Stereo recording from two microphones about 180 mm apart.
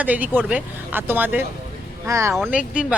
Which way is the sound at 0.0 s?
10° right (ahead or behind).